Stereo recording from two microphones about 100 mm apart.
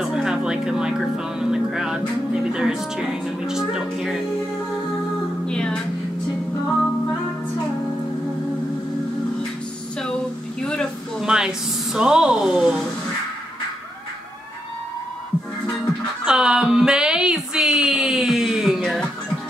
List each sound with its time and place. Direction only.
0.0 s music: 5° right (ahead or behind)
2.5 s speech: 5° right (ahead or behind)
5.5 s music: 10° left (ahead or behind)
10.6 s a sound: 10° left (ahead or behind)
11.1 s speech: 5° right (ahead or behind)
16.3 s a sound: 5° right (ahead or behind)